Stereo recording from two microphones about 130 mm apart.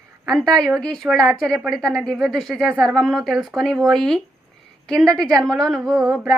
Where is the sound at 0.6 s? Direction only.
Centre (ahead or behind).